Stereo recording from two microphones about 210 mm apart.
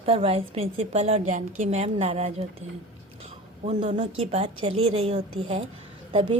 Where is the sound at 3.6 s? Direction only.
35° right (ahead or behind).